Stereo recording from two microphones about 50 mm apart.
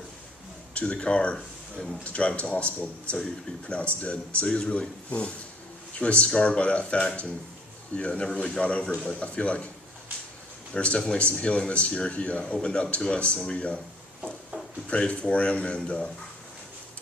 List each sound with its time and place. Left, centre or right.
0.7 s speech: left
10.8 s speech: left
14.8 s speech: left